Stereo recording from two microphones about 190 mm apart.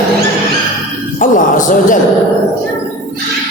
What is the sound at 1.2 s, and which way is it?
Speech, 45° left (ahead or behind).